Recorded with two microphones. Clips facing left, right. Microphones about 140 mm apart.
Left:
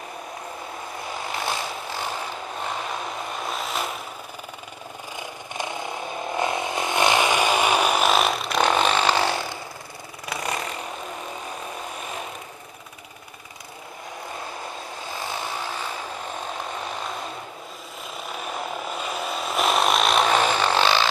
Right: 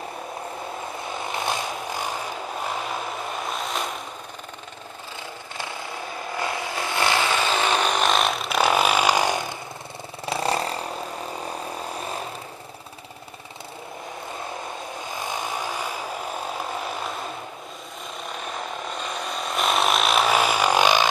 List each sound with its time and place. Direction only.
5.6 s vehicle: 20° left (ahead or behind); by 9.6 s 15° right (ahead or behind)
10.2 s vehicle: 30° right (ahead or behind)
18.9 s a sound: 5° left (ahead or behind); by 21.1 s 15° right (ahead or behind)